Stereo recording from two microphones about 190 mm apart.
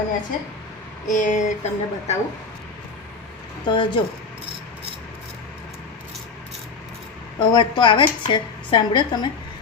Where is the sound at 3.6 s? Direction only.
25° left (ahead or behind).